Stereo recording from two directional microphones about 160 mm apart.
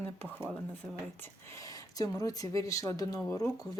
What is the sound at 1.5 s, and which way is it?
Speech, 20° left (ahead or behind).